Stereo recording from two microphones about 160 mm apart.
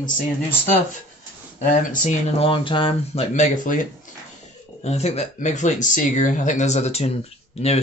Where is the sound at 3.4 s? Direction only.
55° left (ahead or behind).